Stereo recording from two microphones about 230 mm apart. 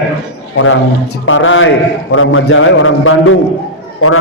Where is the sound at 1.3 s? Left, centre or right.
Left.